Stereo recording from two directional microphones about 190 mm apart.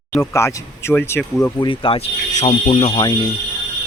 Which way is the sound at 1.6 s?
25° left (ahead or behind).